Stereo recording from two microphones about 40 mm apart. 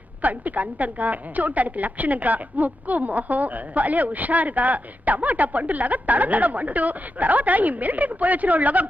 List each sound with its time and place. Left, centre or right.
0.2 s a woman's voice: right